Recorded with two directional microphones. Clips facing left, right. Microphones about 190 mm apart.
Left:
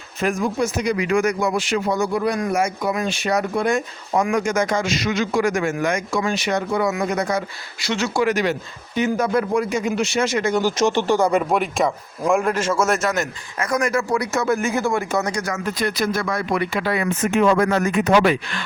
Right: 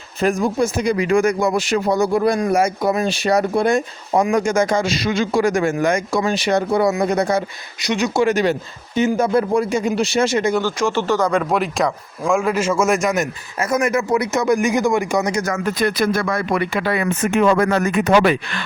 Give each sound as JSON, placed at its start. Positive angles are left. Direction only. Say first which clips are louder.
{"t": 0.2, "sound": "speech", "louder": "right 3 dB", "side_deg": -35}
{"t": 7.9, "sound": "speech", "louder": "right 3 dB", "side_deg": -15}
{"t": 8.2, "sound": "speech", "louder": "right 3 dB", "side_deg": -30}
{"t": 10.6, "sound": "speech", "louder": "left 1 dB", "side_deg": 15}
{"t": 15.4, "sound": "speech", "louder": "right 4 dB", "side_deg": -55}